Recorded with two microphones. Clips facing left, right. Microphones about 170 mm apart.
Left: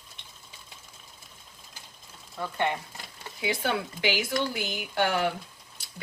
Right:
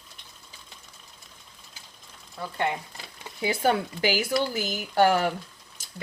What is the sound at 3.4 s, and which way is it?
Speech, 40° right (ahead or behind).